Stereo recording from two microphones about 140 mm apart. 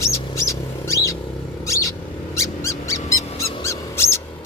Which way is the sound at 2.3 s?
20° left (ahead or behind).